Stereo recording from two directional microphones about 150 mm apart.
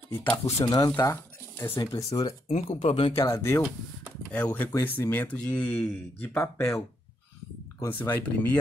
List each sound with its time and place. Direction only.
0.1 s speech: 15° left (ahead or behind)
0.7 s speech: 25° left (ahead or behind)
2.4 s speech: 40° left (ahead or behind)
3.2 s speech: 20° left (ahead or behind)
4.3 s speech: 10° left (ahead or behind)
7.8 s speech: 15° left (ahead or behind)